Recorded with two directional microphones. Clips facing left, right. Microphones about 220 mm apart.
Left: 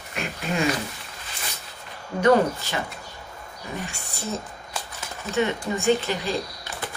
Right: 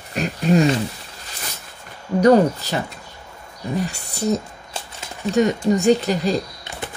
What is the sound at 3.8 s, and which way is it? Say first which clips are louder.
Speech: right 10 dB; 35° right (ahead or behind).